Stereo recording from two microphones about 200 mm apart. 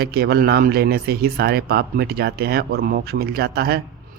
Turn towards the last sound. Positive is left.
turn(degrees=-50)  # may be behind; listen again after turning